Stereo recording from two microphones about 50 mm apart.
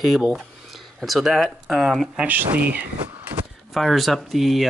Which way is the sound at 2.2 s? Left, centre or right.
Right.